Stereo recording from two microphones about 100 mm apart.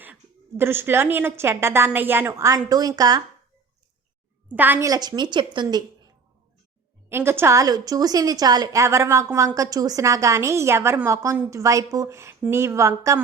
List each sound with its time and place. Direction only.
0.0 s a woman's voice: 20° right (ahead or behind)
2.6 s a woman's voice: 40° right (ahead or behind)
4.4 s a woman's voice: 20° right (ahead or behind)
4.8 s a woman's voice: 40° right (ahead or behind)
7.1 s a woman's voice: 25° right (ahead or behind)